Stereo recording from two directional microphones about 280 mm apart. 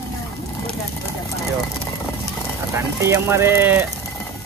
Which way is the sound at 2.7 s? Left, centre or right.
Centre.